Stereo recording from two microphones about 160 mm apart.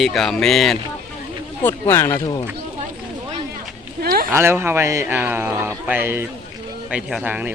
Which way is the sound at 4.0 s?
70° right (ahead or behind).